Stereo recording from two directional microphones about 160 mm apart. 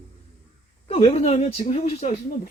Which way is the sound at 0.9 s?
40° left (ahead or behind).